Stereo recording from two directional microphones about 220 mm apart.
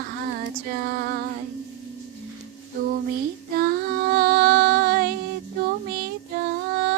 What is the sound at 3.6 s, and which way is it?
Female singing, 45° right (ahead or behind).